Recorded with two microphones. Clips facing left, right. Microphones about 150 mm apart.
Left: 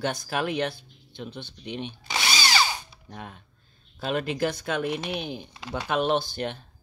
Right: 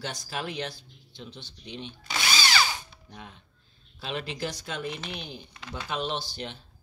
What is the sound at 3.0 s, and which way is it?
Speech, 55° left (ahead or behind).